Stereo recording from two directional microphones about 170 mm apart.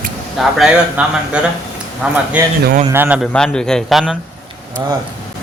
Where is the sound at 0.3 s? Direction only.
5° right (ahead or behind).